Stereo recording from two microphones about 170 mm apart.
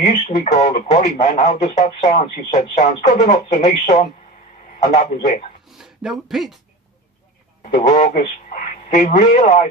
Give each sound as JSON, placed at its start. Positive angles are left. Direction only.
{"t": 0.0, "sound": "speech", "side_deg": 35}
{"t": 0.3, "sound": "speech", "side_deg": 50}
{"t": 5.6, "sound": "a sound", "side_deg": 0}
{"t": 7.6, "sound": "a man's voice", "side_deg": 40}